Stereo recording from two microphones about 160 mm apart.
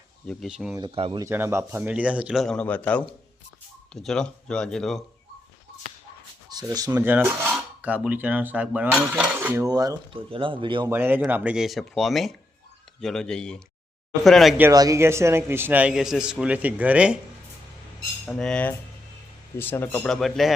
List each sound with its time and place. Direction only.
0.3 s speech: centre (ahead or behind)
0.8 s speech: 35° right (ahead or behind)
1.2 s a man's voice: 15° right (ahead or behind); by 5.0 s 5° left (ahead or behind)
6.5 s a man's voice: 25° right (ahead or behind)
9.6 s speech: 25° right (ahead or behind)
10.8 s a man's voice: 15° right (ahead or behind)
14.6 s a man's voice: 20° right (ahead or behind)
18.3 s speech: 5° left (ahead or behind)